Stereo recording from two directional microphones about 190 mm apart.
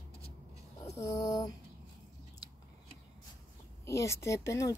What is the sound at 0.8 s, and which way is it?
Speech, 15° left (ahead or behind).